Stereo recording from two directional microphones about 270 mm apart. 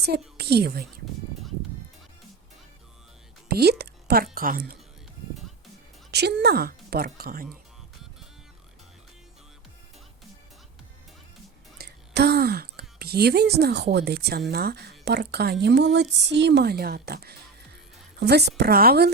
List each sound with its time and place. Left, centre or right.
0.3 s a woman's voice: right
3.5 s speech: right
6.1 s speech: right
11.8 s a sound: right
13.0 s speech: right